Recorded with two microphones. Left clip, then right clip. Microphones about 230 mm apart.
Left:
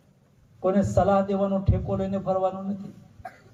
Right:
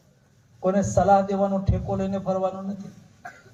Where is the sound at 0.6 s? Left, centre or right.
Left.